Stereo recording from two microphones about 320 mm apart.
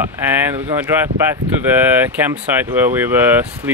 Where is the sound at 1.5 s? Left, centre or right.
Centre.